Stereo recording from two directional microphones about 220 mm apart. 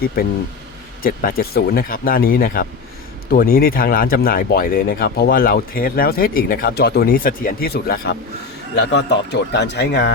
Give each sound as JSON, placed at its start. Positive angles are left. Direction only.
{"t": 1.0, "sound": "a man's voice", "side_deg": 40}